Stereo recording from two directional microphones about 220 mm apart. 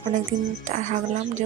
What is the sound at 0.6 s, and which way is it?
Speech, 35° right (ahead or behind).